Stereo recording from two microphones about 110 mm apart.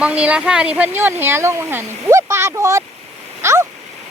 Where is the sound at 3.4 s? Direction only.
25° right (ahead or behind).